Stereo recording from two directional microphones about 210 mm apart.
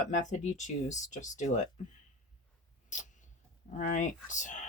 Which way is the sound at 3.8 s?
40° left (ahead or behind).